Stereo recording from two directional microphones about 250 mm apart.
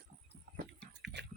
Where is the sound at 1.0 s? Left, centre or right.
Right.